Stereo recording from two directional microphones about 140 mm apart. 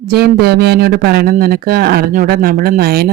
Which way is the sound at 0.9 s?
90° right.